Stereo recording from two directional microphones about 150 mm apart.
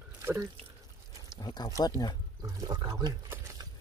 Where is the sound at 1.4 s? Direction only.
30° left (ahead or behind).